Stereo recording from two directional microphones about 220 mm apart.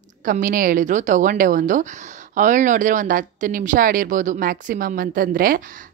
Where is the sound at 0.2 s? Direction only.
40° right (ahead or behind).